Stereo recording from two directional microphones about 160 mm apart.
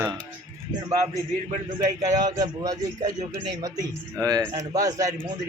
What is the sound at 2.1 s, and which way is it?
Speech, 25° right (ahead or behind).